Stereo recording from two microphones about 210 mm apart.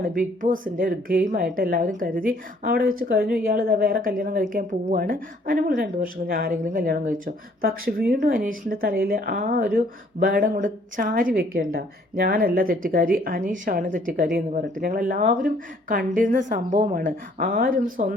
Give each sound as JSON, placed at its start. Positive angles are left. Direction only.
{"t": 0.0, "sound": "a woman's voice", "side_deg": -40}